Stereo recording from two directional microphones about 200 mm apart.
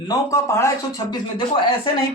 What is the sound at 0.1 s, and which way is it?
Speech, 15° left (ahead or behind).